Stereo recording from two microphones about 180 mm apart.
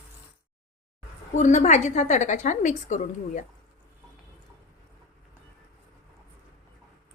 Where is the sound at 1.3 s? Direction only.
45° left (ahead or behind).